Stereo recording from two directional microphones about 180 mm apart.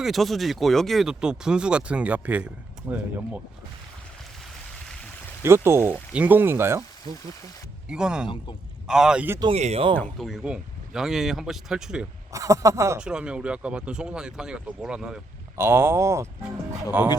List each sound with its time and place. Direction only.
0.0 s speech: centre (ahead or behind)
5.4 s speech: 15° right (ahead or behind)
7.9 s speech: 5° right (ahead or behind)
9.4 s speech: 35° right (ahead or behind)
10.0 s speech: centre (ahead or behind)
12.3 s speech: 20° right (ahead or behind)
13.0 s speech: 5° right (ahead or behind)